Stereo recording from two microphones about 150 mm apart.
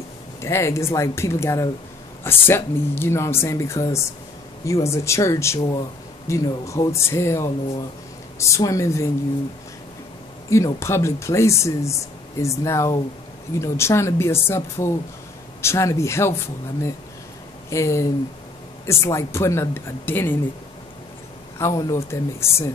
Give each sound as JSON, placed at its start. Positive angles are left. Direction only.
{"t": 0.4, "sound": "speech", "side_deg": 20}
{"t": 10.5, "sound": "speech", "side_deg": 20}
{"t": 17.6, "sound": "speech", "side_deg": 20}
{"t": 21.5, "sound": "speech", "side_deg": 20}